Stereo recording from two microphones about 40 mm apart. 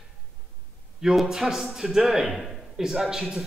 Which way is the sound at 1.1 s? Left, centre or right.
Centre.